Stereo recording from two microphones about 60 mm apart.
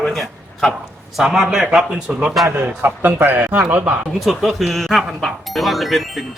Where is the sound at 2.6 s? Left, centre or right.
Right.